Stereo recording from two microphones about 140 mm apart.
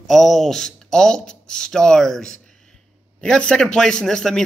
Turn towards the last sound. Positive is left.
turn(degrees=5)  # may be behind; listen again after turning